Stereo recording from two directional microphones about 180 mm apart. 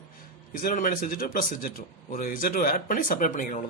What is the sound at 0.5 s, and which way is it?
Speech, 50° left (ahead or behind).